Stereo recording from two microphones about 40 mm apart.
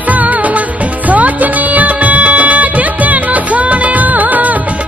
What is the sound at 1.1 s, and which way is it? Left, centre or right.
Music, right.